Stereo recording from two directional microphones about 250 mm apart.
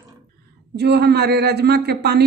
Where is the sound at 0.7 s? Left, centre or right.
Right.